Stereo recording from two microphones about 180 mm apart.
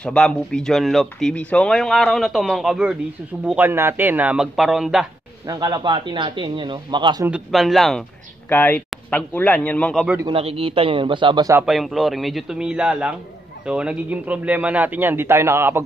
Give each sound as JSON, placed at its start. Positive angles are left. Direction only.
{"t": 0.0, "sound": "a man's voice", "side_deg": 5}
{"t": 5.5, "sound": "a man's voice", "side_deg": -20}
{"t": 7.2, "sound": "speech", "side_deg": -5}
{"t": 10.2, "sound": "a man's voice", "side_deg": -30}
{"t": 11.6, "sound": "a man's voice", "side_deg": 0}